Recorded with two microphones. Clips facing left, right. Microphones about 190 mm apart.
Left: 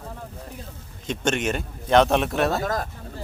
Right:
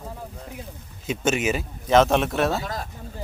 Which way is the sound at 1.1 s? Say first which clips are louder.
Right 1 dB; 5° right (ahead or behind).